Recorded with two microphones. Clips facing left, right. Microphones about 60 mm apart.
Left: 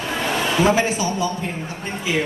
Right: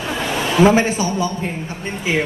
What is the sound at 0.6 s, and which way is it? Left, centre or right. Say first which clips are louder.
Speech: right 3 dB; right.